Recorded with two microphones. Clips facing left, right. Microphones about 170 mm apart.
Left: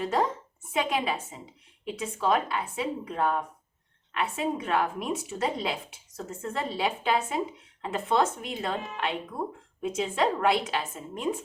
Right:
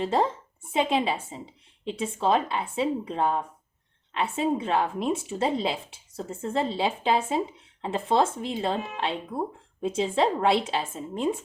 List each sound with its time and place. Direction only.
0.0 s a woman's voice: 25° right (ahead or behind)